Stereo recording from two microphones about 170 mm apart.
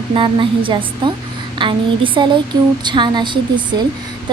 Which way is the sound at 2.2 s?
25° right (ahead or behind).